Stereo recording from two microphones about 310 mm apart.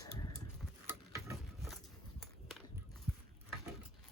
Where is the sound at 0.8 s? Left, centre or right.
Centre.